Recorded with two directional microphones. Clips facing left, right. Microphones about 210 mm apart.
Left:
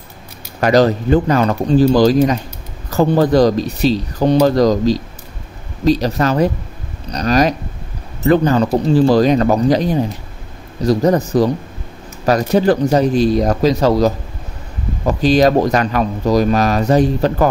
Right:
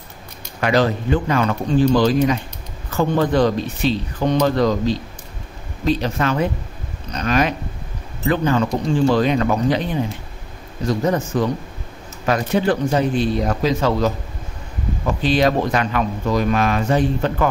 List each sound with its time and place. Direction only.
0.6 s speech: 40° left (ahead or behind)
2.9 s speech: 40° left (ahead or behind)